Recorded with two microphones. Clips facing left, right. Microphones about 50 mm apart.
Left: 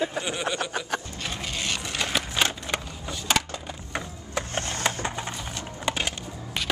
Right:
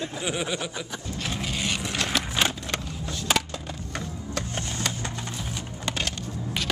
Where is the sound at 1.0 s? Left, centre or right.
Centre.